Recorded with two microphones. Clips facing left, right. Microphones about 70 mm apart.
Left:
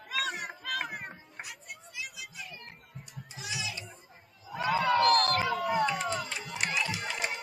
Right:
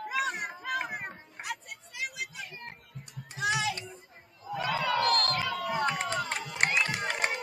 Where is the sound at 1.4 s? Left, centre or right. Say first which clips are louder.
Right 7 dB; right.